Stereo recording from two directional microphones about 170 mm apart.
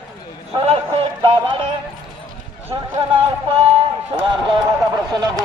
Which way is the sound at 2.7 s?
25° right (ahead or behind).